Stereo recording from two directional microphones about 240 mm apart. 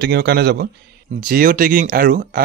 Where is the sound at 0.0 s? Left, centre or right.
Right.